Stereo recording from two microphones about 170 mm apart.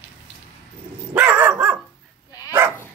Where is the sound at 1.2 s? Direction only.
10° right (ahead or behind).